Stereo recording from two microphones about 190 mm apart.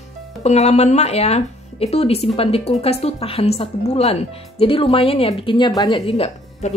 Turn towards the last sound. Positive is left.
turn(degrees=35)  # may be behind; listen again after turning